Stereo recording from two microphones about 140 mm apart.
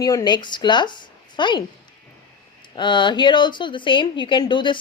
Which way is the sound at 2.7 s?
35° left (ahead or behind).